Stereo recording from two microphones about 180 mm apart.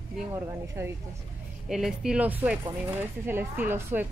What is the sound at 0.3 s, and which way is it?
A woman's voice, 10° right (ahead or behind).